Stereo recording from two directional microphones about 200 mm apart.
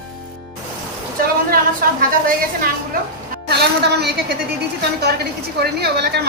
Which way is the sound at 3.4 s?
55° right (ahead or behind).